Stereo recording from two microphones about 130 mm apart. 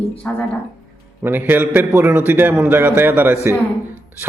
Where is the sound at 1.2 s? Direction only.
15° right (ahead or behind).